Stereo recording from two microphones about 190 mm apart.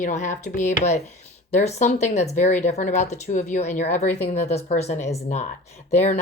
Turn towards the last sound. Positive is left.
turn(degrees=35)  # may be behind; listen again after turning